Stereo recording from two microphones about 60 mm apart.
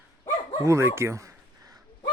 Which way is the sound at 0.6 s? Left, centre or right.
Right.